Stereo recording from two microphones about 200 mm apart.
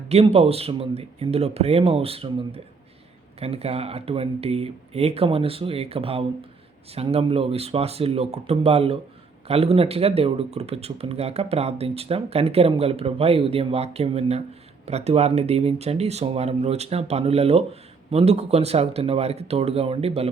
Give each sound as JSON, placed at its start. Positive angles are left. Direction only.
{"t": 0.1, "sound": "speech", "side_deg": -30}